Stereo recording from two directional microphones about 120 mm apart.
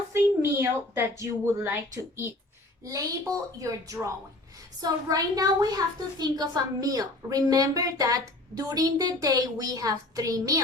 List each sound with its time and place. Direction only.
0.1 s a woman's voice: 20° right (ahead or behind)